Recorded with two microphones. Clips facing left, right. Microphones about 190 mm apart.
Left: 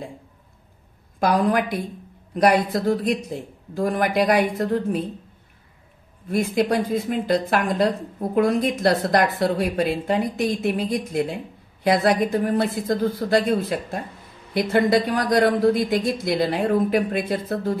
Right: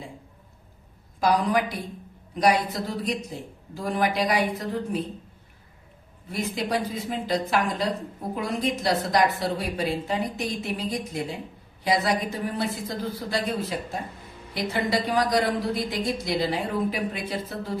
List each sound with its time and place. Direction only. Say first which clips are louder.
1.2 s speech: left 3 dB; 55° left (ahead or behind)
6.2 s speech: left 8 dB; 50° left (ahead or behind)